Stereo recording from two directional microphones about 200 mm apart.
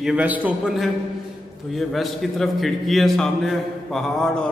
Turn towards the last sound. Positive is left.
turn(degrees=0)  # may be behind; listen again after turning